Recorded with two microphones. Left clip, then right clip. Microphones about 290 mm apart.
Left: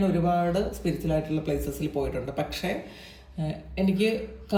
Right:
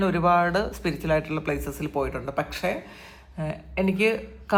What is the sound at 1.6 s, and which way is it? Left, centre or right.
Speech, centre.